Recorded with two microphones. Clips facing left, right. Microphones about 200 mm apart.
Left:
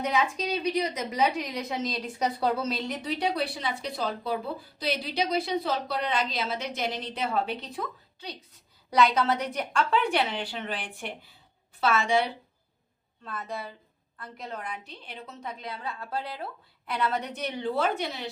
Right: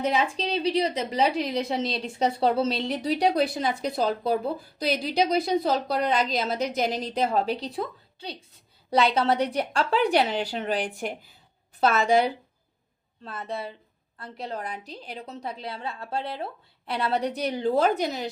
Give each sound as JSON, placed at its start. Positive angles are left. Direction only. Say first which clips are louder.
{"t": 0.0, "sound": "a woman's voice", "louder": "right 2 dB", "side_deg": -30}
{"t": 13.2, "sound": "a woman's voice", "louder": "right 3 dB", "side_deg": -30}